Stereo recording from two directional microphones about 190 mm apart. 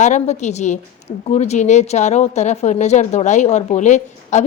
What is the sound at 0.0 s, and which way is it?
A woman's voice, 40° left (ahead or behind).